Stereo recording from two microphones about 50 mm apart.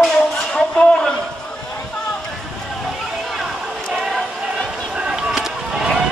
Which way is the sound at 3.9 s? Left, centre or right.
Centre.